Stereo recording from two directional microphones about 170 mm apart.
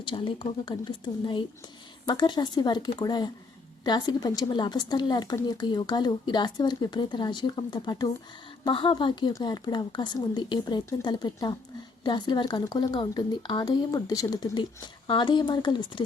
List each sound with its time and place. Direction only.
0.0 s speech: 30° left (ahead or behind)